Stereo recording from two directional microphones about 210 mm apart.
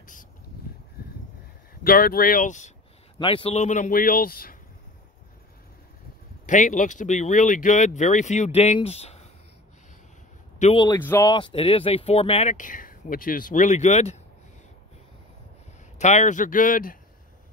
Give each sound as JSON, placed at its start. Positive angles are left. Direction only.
{"t": 0.0, "sound": "a sound", "side_deg": 40}
{"t": 1.8, "sound": "speech", "side_deg": 45}
{"t": 3.2, "sound": "speech", "side_deg": 25}
{"t": 6.4, "sound": "speech", "side_deg": 35}
{"t": 10.6, "sound": "speech", "side_deg": 25}
{"t": 11.0, "sound": "speech", "side_deg": 10}
{"t": 11.2, "sound": "speech", "side_deg": 20}
{"t": 16.0, "sound": "speech", "side_deg": 35}